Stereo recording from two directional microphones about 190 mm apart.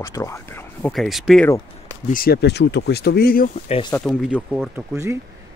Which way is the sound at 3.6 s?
30° left (ahead or behind).